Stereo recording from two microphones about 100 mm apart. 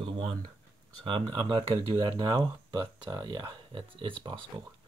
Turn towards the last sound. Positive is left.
turn(degrees=-50)  # may be behind; listen again after turning